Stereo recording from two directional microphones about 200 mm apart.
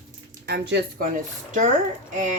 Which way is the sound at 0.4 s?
60° right (ahead or behind).